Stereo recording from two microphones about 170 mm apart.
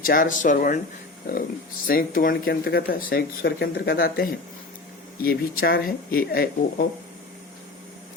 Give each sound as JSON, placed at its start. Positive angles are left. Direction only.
{"t": 0.0, "sound": "speech", "side_deg": 55}
{"t": 1.9, "sound": "speech", "side_deg": 60}